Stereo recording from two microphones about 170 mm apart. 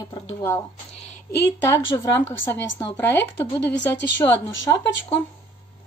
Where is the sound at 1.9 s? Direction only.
25° left (ahead or behind).